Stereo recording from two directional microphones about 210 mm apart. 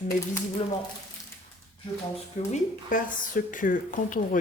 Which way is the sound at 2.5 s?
40° left (ahead or behind).